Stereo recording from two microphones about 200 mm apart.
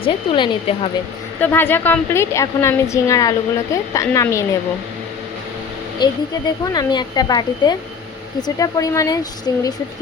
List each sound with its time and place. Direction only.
0.0 s a woman's voice: 25° left (ahead or behind)
1.4 s a woman's voice: 10° left (ahead or behind)
6.0 s a woman's voice: 20° left (ahead or behind)